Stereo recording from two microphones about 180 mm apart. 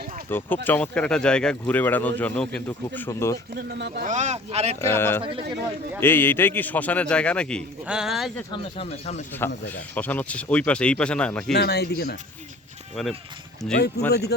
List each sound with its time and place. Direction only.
0.3 s speech: 10° left (ahead or behind)
3.5 s speech: 60° right (ahead or behind)
3.9 s speech: 45° right (ahead or behind)
4.8 s speech: 15° left (ahead or behind)
5.2 s speech: 30° right (ahead or behind)
6.0 s speech: 10° left (ahead or behind)
8.5 s speech: 30° left (ahead or behind)
9.6 s speech: 10° left (ahead or behind)
11.5 s speech: 65° left (ahead or behind)
13.7 s speech: 65° left (ahead or behind)